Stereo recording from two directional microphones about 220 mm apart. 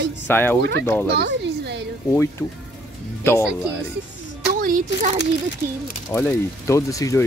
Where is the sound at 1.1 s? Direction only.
50° right (ahead or behind).